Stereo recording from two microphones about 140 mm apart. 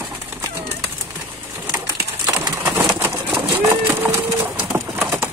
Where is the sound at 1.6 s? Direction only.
25° right (ahead or behind).